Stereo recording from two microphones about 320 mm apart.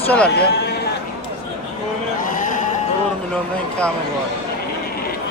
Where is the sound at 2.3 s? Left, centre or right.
Left.